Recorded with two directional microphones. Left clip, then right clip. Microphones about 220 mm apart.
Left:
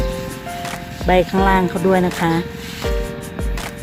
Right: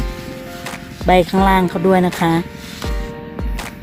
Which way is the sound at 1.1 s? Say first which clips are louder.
Right 2 dB; 40° right (ahead or behind).